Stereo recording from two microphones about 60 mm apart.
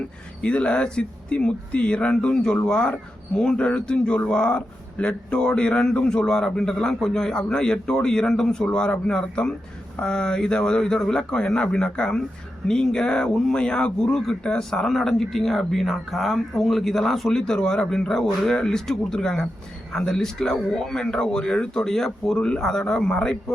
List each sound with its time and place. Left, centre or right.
0.4 s a man's voice: centre